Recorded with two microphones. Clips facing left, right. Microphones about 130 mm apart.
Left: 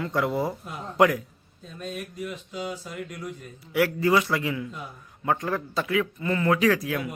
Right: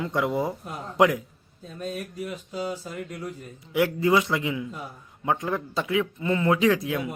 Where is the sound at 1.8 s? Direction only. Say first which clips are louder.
Right 1 dB; 40° right (ahead or behind).